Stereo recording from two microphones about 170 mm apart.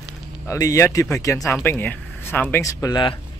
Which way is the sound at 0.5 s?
20° left (ahead or behind).